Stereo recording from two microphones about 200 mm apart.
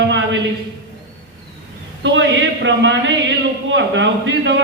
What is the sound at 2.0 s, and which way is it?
A man's voice, 65° right (ahead or behind).